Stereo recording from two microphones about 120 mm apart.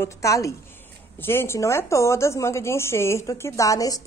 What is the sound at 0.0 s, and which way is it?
Speech, 25° left (ahead or behind).